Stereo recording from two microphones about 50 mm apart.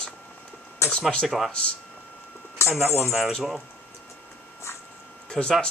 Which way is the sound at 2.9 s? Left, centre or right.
Left.